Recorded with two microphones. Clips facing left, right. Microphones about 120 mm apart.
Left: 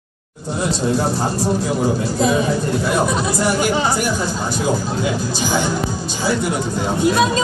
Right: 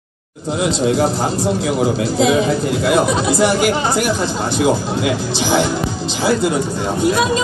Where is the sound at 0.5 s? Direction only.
90° right.